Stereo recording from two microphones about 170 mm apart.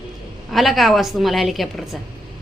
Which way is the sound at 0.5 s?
Centre (ahead or behind).